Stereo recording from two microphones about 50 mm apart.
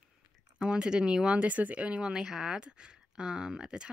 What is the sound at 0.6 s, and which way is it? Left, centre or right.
Speech, centre.